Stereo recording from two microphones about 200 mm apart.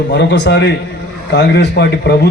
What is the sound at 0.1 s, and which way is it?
A man's voice, 60° left (ahead or behind).